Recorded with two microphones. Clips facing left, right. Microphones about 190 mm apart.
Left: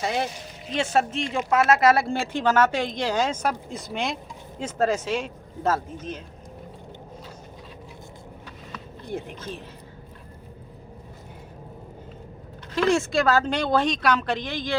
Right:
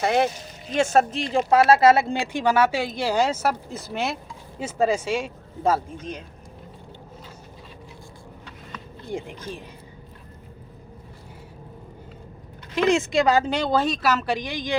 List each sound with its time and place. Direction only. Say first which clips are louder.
0.0 s speech: right 6 dB; 60° right (ahead or behind)
0.7 s speech: right 4 dB; 45° right (ahead or behind); by 6.2 s 10° right (ahead or behind)
9.1 s speech: right 1 dB; 10° right (ahead or behind)
12.7 s speech: right 1 dB; 20° right (ahead or behind)